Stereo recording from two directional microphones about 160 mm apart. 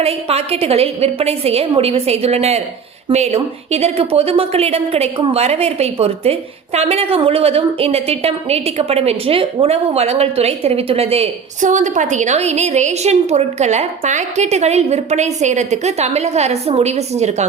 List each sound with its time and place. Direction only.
0.0 s a woman's voice: 40° right (ahead or behind)